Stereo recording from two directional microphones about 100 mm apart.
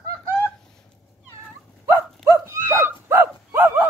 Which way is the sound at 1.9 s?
30° right (ahead or behind).